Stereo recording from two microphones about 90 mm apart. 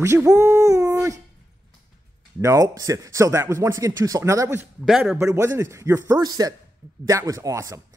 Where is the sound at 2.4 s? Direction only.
40° right (ahead or behind).